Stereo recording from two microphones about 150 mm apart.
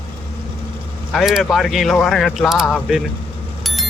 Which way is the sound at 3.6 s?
Centre (ahead or behind).